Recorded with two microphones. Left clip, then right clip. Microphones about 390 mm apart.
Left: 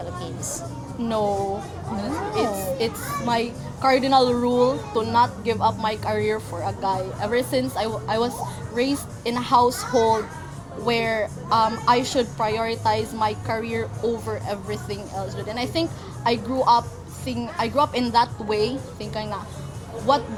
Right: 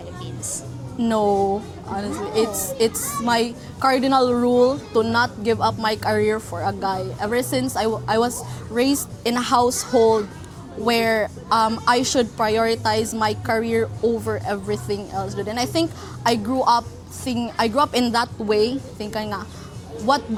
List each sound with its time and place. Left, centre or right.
1.0 s a woman's voice: right
14.7 s speech: right